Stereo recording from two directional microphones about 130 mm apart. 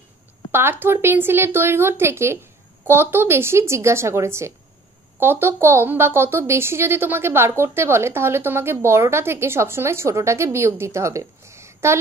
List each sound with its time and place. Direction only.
0.5 s a woman's voice: 15° right (ahead or behind)